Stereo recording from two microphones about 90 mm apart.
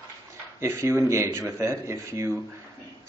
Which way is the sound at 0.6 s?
30° right (ahead or behind).